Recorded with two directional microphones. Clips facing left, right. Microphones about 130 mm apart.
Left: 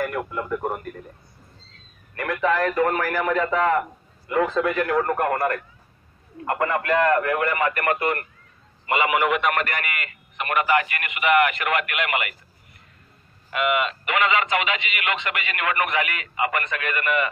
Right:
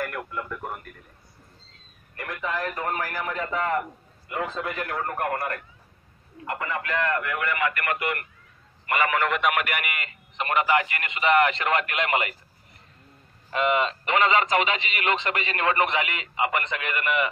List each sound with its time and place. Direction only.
0.0 s speech: 20° left (ahead or behind)
0.4 s speech: 40° left (ahead or behind)
2.1 s a man's voice: 85° left
6.4 s speech: 55° left (ahead or behind); by 8.3 s 35° left (ahead or behind)
8.8 s a man's voice: 20° left (ahead or behind)
9.4 s a man's voice: 5° right (ahead or behind); by 12.4 s 30° right (ahead or behind)
13.5 s speech: 30° right (ahead or behind)